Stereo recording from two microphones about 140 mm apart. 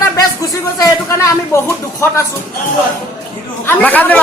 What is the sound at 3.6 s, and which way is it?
Speech, 15° left (ahead or behind).